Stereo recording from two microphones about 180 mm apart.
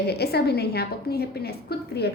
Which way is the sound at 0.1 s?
65° left (ahead or behind).